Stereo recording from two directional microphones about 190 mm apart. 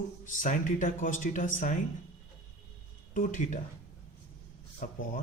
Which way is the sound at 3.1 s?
45° left (ahead or behind).